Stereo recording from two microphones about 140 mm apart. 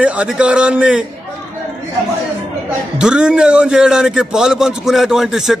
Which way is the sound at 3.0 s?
5° right (ahead or behind).